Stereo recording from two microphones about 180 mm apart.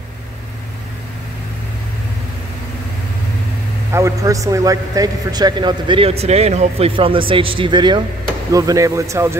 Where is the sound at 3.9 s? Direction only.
15° right (ahead or behind).